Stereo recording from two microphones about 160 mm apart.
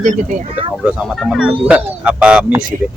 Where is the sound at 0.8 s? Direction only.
5° right (ahead or behind).